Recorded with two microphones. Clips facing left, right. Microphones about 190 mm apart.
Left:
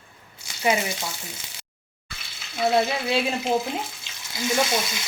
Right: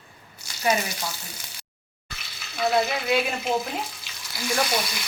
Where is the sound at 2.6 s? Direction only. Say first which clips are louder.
Left 2 dB; 25° left (ahead or behind).